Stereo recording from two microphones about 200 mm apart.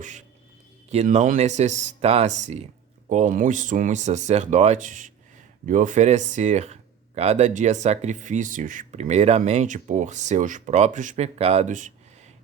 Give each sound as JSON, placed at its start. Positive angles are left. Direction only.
{"t": 0.9, "sound": "speech", "side_deg": -35}